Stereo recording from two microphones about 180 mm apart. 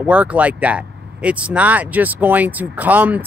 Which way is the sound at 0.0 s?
5° right (ahead or behind).